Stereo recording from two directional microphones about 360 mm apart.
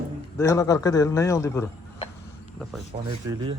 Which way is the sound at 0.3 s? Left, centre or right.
Centre.